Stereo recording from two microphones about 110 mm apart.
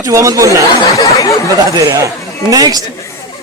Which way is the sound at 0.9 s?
30° left (ahead or behind).